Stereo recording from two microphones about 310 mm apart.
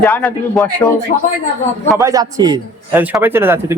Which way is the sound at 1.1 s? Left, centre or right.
Left.